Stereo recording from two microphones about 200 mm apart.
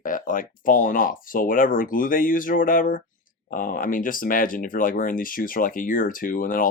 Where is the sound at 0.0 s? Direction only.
45° left (ahead or behind).